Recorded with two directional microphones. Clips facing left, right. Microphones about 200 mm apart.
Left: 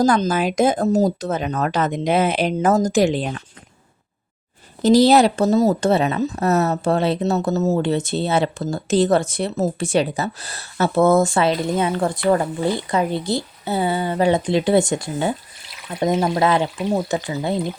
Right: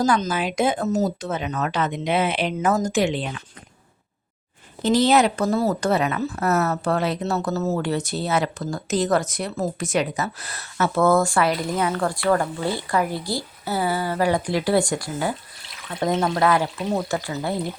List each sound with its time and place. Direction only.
0.0 s speech: 40° left (ahead or behind)
4.8 s speech: 40° left (ahead or behind)
5.5 s speech: 20° left (ahead or behind)